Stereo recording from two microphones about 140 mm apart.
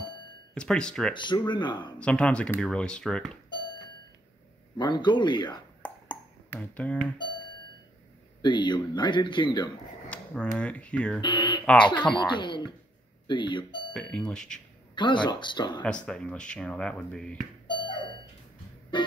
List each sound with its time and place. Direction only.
0.6 s speech: 5° left (ahead or behind)
1.1 s speech: 35° left (ahead or behind)
2.0 s speech: 10° left (ahead or behind)
4.7 s speech: 35° left (ahead or behind)
5.8 s ping: 10° left (ahead or behind)
7.2 s music: 35° left (ahead or behind)
8.4 s speech: 35° left (ahead or behind)
10.0 s speech: 10° left (ahead or behind)
11.1 s speech: 35° left (ahead or behind)
13.9 s speech: 5° left (ahead or behind)
15.0 s speech: 35° left (ahead or behind)
15.8 s speech: 5° left (ahead or behind)
17.6 s doorbell: 35° left (ahead or behind)
18.9 s music: 35° left (ahead or behind)